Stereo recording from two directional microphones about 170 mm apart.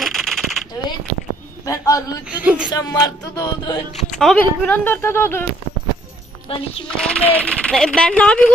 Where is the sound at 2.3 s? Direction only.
10° right (ahead or behind).